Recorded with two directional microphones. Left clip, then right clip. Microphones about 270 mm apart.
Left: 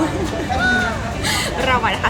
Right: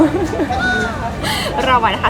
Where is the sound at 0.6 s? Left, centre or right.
Centre.